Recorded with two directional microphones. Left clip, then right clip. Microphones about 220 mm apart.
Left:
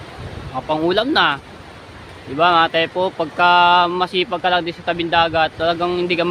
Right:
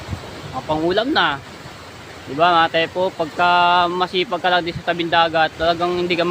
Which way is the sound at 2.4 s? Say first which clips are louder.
Left 1 dB; 15° left (ahead or behind).